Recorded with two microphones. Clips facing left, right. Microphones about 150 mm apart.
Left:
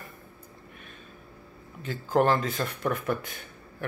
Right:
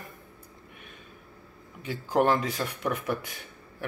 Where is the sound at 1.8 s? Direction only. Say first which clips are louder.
Left 1 dB; 15° right (ahead or behind).